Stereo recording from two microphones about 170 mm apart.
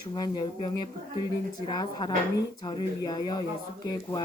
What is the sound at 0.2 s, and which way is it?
Speech, 25° left (ahead or behind).